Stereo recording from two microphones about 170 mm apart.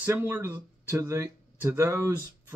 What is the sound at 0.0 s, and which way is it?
Speech, 15° right (ahead or behind).